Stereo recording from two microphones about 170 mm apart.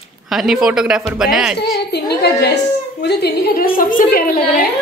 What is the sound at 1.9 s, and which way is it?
A woman's voice, 75° left (ahead or behind).